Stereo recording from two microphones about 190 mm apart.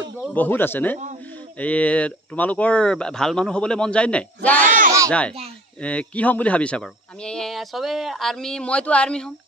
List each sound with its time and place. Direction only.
0.2 s speech: 10° left (ahead or behind)
4.6 s speech: 45° right (ahead or behind)
5.8 s speech: 5° left (ahead or behind)